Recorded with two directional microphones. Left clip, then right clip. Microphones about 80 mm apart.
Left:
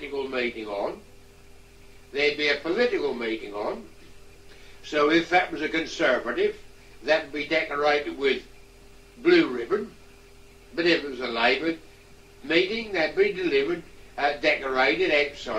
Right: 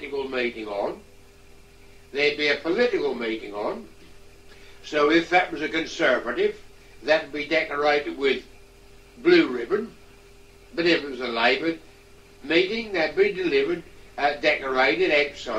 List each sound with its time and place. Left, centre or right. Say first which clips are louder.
0.0 s speech: right 1 dB; left
2.1 s a man's voice: right 1 dB; left
4.8 s a man's voice: right 1 dB; left